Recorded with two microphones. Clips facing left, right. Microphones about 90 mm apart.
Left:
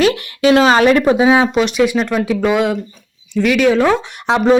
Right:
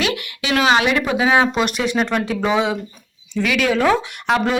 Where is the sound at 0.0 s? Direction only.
35° left (ahead or behind).